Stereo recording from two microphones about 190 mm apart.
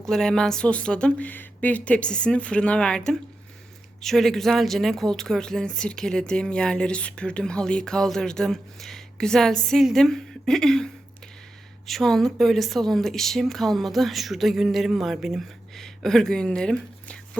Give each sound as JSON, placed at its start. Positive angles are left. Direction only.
{"t": 0.0, "sound": "a woman's voice", "side_deg": 5}
{"t": 11.9, "sound": "a woman's voice", "side_deg": 0}